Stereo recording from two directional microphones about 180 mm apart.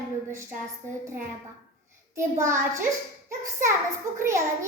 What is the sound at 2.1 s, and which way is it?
A child's voice, 15° right (ahead or behind).